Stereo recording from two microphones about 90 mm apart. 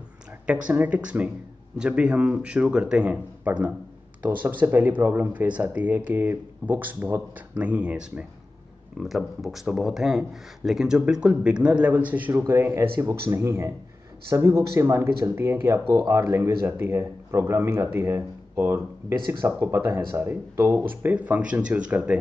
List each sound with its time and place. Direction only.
0.5 s speech: 15° right (ahead or behind)
8.9 s speech: centre (ahead or behind)